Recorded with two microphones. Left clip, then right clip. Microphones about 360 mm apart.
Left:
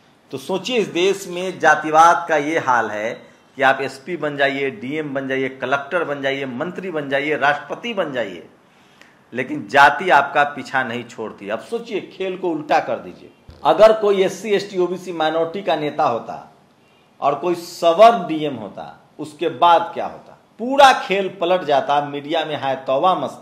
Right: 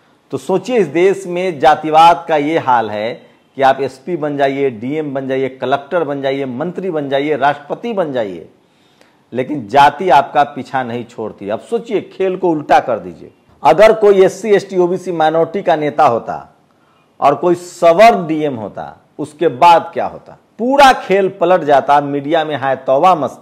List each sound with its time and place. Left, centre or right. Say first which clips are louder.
0.3 s a man's voice: right 7 dB; right
9.5 s a man's voice: right 3 dB; right
11.7 s a man's voice: right 7 dB; right